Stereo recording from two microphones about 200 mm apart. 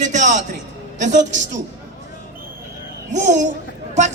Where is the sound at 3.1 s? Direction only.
35° right (ahead or behind).